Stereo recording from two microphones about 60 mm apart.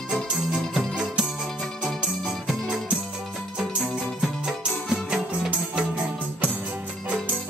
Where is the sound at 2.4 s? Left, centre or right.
Centre.